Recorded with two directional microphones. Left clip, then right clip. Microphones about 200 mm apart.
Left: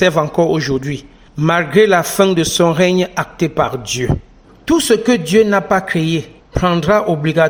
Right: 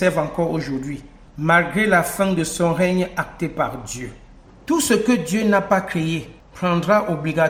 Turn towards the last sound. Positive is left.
turn(degrees=35)  # may be behind; listen again after turning